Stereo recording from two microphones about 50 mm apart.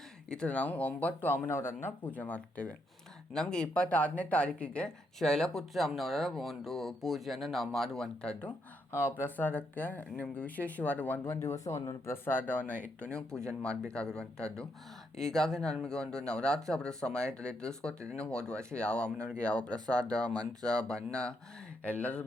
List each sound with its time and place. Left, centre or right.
0.3 s speech: left
1.5 s speech: left
2.0 s speech: left
3.3 s speech: centre
8.2 s speech: left
8.9 s speech: left
11.3 s speech: left
13.0 s speech: centre
15.2 s speech: centre
21.8 s speech: left